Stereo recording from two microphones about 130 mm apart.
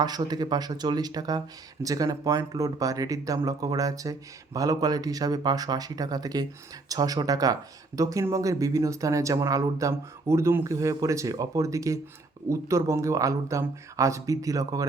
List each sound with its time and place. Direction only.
0.0 s speech: 30° right (ahead or behind)